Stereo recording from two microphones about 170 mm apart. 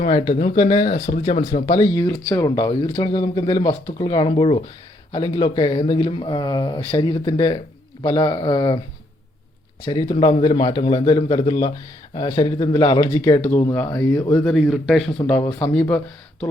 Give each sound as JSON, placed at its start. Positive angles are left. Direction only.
{"t": 0.0, "sound": "speech", "side_deg": 35}
{"t": 9.8, "sound": "speech", "side_deg": 25}
{"t": 13.7, "sound": "speech", "side_deg": 20}
{"t": 14.4, "sound": "speech", "side_deg": 0}
{"t": 15.4, "sound": "speech", "side_deg": 25}
{"t": 15.7, "sound": "speech", "side_deg": 5}